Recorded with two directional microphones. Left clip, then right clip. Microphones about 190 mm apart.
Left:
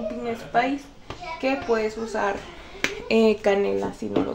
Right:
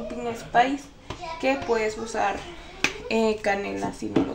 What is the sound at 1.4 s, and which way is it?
Speech, 25° left (ahead or behind).